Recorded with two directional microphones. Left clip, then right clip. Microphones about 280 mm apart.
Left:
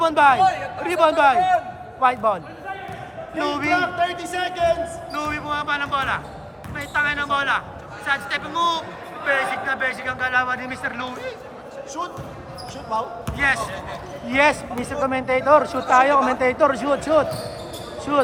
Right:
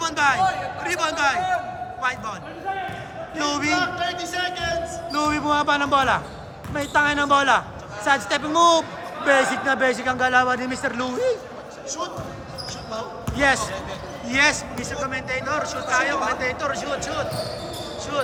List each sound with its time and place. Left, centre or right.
0.0 s a man's voice: centre
3.3 s a man's voice: centre
3.8 s speech: left
5.1 s a man's voice: centre
13.3 s a man's voice: centre
14.3 s a woman's voice: centre; by 18.3 s left